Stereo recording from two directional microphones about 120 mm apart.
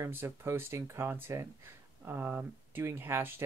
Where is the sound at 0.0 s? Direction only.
20° right (ahead or behind).